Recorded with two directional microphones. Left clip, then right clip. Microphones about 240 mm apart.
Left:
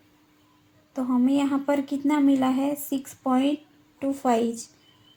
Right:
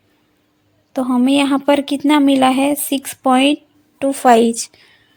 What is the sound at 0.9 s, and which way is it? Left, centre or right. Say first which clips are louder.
A woman's voice: right 9 dB; right.